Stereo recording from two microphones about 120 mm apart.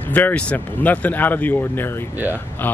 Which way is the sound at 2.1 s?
15° right (ahead or behind).